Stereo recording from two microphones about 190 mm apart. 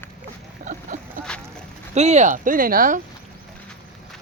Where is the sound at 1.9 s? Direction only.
35° right (ahead or behind).